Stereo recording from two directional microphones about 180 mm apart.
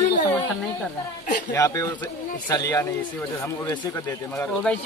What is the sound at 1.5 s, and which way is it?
Speech, 20° left (ahead or behind).